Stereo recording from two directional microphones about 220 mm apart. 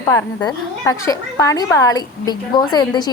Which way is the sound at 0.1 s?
10° left (ahead or behind).